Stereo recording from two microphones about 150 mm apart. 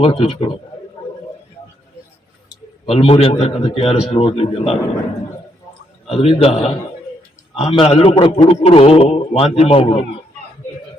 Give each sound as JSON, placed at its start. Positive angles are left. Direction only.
{"t": 0.0, "sound": "a man's voice", "side_deg": 40}
{"t": 2.8, "sound": "a man's voice", "side_deg": 40}
{"t": 6.1, "sound": "a man's voice", "side_deg": 40}